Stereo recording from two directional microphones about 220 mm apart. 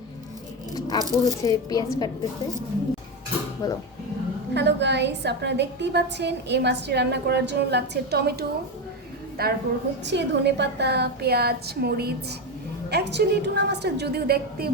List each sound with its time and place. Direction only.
0.9 s speech: 15° right (ahead or behind)
1.2 s speech: 15° left (ahead or behind)
3.6 s speech: 15° left (ahead or behind)
4.5 s a woman's voice: 50° right (ahead or behind)